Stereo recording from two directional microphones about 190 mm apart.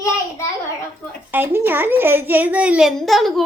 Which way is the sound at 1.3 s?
10° right (ahead or behind).